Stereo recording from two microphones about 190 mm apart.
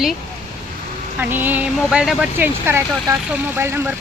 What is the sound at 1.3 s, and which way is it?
Speech, 10° right (ahead or behind).